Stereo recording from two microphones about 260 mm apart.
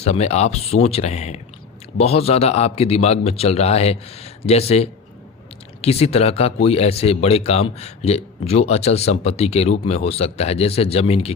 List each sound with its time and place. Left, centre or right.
0.0 s speech: left